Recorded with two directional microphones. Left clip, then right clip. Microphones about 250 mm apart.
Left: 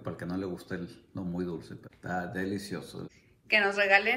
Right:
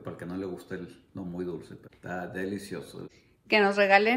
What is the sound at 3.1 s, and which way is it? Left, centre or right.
A woman's voice, centre.